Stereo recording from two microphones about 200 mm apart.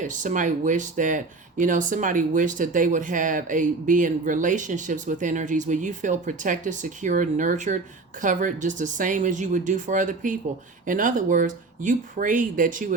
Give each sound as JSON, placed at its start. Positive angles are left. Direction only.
{"t": 0.0, "sound": "speech", "side_deg": -40}